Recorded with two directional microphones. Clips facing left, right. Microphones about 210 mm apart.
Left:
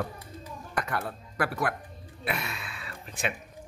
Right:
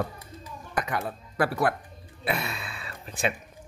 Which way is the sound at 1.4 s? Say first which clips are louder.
Right 4 dB; 30° right (ahead or behind).